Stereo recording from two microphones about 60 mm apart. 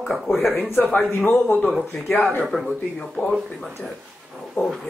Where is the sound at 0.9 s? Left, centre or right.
Left.